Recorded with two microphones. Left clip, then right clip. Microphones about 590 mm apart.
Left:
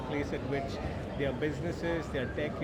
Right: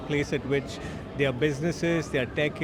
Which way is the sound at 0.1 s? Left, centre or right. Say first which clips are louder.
Right 8 dB; right.